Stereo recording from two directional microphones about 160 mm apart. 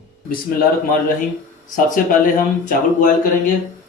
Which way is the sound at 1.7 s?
60° left (ahead or behind).